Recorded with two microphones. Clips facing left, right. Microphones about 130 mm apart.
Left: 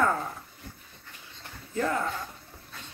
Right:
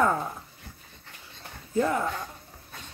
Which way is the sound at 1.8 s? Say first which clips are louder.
Right 3 dB; 15° right (ahead or behind).